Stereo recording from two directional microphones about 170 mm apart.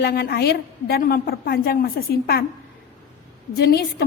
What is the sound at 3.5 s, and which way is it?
Speech, 65° left (ahead or behind).